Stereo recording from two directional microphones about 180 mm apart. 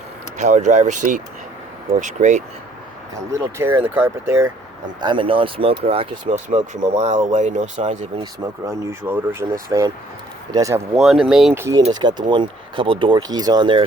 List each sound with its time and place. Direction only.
0.3 s speech: 40° right (ahead or behind)
3.4 s speech: 15° right (ahead or behind)
4.9 s speech: 25° right (ahead or behind)
8.2 s speech: 15° right (ahead or behind)
10.9 s speech: centre (ahead or behind)
11.9 s speech: 25° right (ahead or behind)